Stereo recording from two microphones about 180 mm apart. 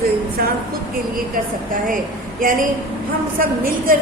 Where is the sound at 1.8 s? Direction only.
50° right (ahead or behind).